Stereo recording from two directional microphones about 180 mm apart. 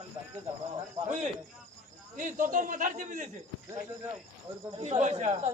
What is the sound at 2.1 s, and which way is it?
A man's voice, 50° right (ahead or behind).